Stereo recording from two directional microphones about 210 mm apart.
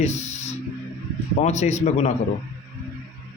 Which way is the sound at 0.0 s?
30° left (ahead or behind).